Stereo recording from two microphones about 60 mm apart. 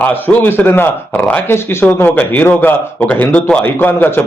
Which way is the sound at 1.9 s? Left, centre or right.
Left.